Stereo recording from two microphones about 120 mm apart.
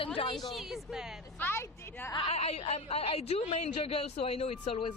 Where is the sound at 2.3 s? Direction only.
60° left (ahead or behind).